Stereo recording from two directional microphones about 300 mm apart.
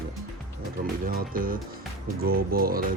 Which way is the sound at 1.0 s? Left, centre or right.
Right.